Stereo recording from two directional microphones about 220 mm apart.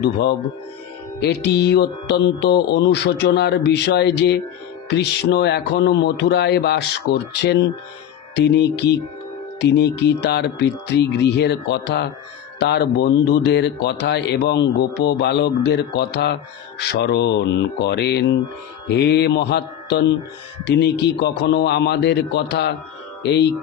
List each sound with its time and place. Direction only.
0.0 s speech: 50° left (ahead or behind)